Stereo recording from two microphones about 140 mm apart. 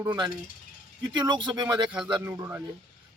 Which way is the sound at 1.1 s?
30° right (ahead or behind).